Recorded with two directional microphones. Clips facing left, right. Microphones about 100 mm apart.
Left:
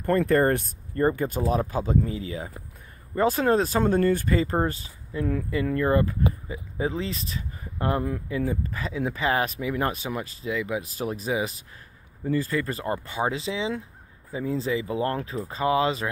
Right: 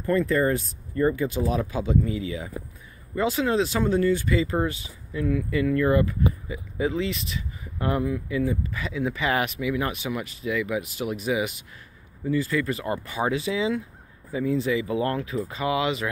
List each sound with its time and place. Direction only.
0.0 s speech: 55° left (ahead or behind); by 16.1 s 35° left (ahead or behind)